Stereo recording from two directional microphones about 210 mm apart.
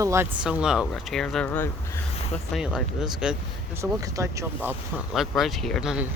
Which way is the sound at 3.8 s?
15° right (ahead or behind).